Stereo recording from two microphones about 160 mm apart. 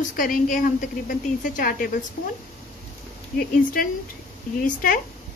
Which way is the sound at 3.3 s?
65° left (ahead or behind).